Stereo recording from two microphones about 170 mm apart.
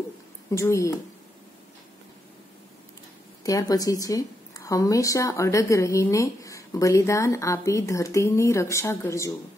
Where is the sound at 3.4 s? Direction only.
20° left (ahead or behind).